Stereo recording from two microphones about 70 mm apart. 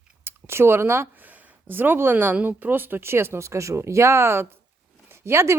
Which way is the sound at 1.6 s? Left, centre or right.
Right.